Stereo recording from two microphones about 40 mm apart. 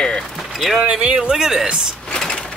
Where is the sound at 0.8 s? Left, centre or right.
Right.